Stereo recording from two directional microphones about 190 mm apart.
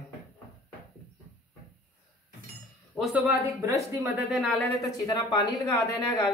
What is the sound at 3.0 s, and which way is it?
Speech, 10° right (ahead or behind).